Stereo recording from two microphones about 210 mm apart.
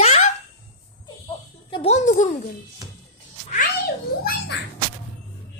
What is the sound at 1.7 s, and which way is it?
Speech, 30° left (ahead or behind).